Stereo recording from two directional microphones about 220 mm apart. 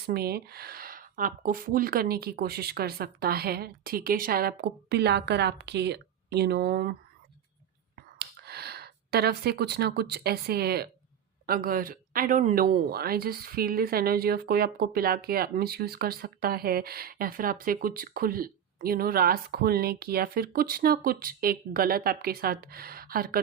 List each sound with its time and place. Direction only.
0.0 s speech: 45° right (ahead or behind)
8.2 s speech: 45° right (ahead or behind)